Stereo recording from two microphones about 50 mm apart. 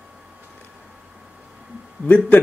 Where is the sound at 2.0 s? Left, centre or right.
Left.